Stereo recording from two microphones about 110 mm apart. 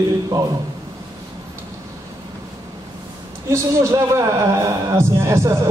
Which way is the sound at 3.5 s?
25° right (ahead or behind).